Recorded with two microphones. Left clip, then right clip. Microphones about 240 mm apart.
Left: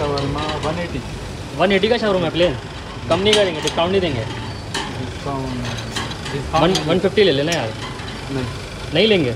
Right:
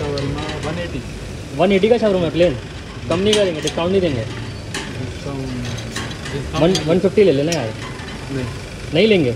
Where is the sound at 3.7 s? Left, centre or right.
Centre.